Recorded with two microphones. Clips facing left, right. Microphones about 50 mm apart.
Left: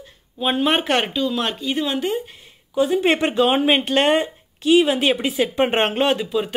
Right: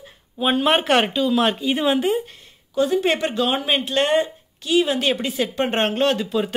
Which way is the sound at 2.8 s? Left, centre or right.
Centre.